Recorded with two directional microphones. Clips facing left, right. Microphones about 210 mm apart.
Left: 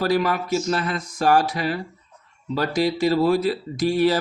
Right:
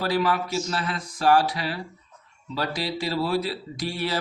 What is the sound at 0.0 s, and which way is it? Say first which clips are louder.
Speech: left 3 dB; 45° left (ahead or behind).